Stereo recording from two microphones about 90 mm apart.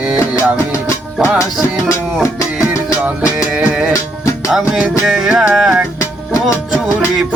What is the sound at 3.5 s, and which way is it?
Music, 10° right (ahead or behind).